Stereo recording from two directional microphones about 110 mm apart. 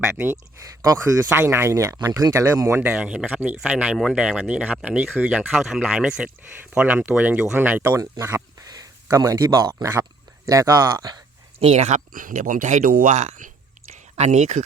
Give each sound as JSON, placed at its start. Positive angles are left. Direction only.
{"t": 0.5, "sound": "speech", "side_deg": -30}
{"t": 2.8, "sound": "speech", "side_deg": -10}
{"t": 8.2, "sound": "speech", "side_deg": -30}
{"t": 11.6, "sound": "speech", "side_deg": -80}